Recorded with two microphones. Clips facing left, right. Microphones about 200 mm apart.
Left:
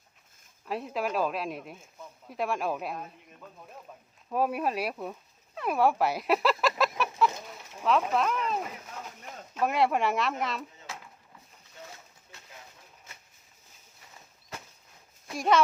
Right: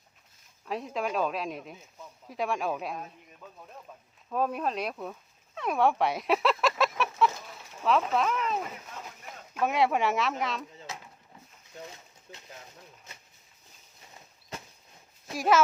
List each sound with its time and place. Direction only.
0.6 s speech: centre (ahead or behind)
4.3 s speech: 10° left (ahead or behind)
5.5 s chicken: 5° left (ahead or behind)
7.9 s speech: centre (ahead or behind)
10.9 s a sound: 20° right (ahead or behind)
12.3 s a sound: 45° right (ahead or behind)
15.3 s speech: centre (ahead or behind)